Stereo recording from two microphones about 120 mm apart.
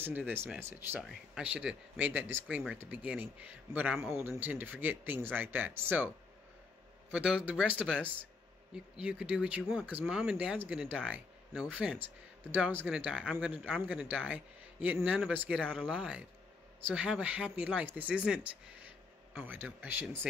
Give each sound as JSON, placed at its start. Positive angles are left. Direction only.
{"t": 0.0, "sound": "speech", "side_deg": -15}
{"t": 1.0, "sound": "speech", "side_deg": -5}
{"t": 13.6, "sound": "speech", "side_deg": 5}
{"t": 13.8, "sound": "speech", "side_deg": -15}